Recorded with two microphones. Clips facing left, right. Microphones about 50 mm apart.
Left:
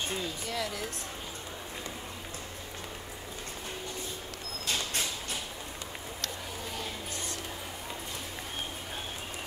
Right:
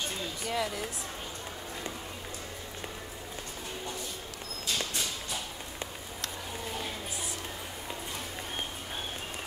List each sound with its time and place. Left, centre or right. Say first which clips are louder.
0.5 s speech: right 5 dB; centre